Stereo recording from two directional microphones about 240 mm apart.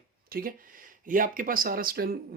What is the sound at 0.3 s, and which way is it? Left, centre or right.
Speech, right.